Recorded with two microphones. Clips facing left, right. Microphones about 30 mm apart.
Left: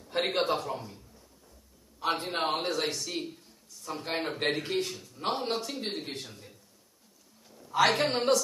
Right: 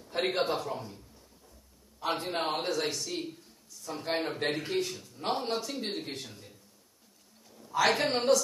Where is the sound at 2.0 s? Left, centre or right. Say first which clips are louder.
Left 2 dB; left.